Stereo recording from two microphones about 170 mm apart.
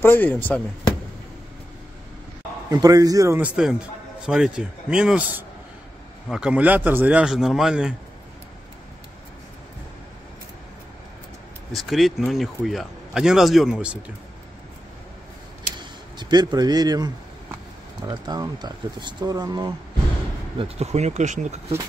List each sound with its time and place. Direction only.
0.0 s speech: 10° left (ahead or behind)
2.7 s speech: 20° right (ahead or behind)
3.3 s speech: 5° right (ahead or behind)
11.7 s speech: centre (ahead or behind)
15.8 s speech: 25° right (ahead or behind)
20.5 s speech: 35° right (ahead or behind)